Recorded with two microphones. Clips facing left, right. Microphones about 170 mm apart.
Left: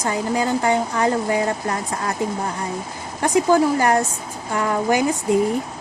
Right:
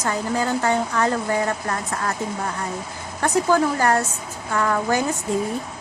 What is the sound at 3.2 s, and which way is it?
Speech, 15° left (ahead or behind).